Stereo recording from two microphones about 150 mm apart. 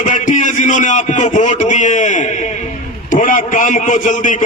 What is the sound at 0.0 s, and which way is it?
A man's voice, 60° left (ahead or behind).